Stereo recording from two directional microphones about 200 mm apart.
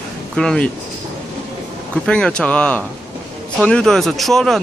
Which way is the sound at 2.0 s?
5° left (ahead or behind).